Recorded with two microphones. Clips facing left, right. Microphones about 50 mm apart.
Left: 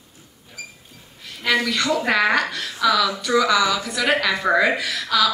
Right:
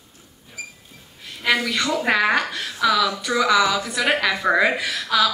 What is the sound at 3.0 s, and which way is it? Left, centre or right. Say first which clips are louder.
Speech: left 1 dB; right.